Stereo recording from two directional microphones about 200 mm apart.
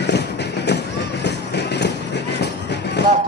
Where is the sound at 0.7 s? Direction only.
55° left (ahead or behind).